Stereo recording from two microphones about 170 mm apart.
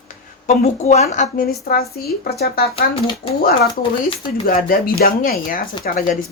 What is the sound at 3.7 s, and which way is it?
Speech, 30° left (ahead or behind).